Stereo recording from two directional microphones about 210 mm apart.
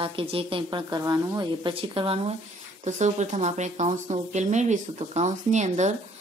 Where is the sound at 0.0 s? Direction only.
25° right (ahead or behind).